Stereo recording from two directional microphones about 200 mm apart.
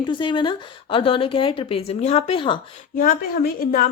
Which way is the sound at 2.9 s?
45° left (ahead or behind).